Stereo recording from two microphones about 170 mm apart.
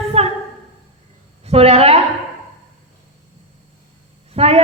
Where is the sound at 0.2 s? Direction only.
35° right (ahead or behind).